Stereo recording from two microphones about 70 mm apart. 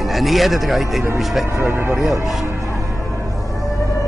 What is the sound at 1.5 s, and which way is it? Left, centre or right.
Speech, right.